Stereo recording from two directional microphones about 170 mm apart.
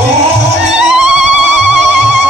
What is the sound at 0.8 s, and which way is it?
Music, 5° right (ahead or behind).